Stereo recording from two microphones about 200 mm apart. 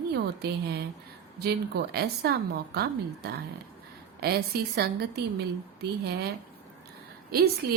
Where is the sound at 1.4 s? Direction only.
55° right (ahead or behind).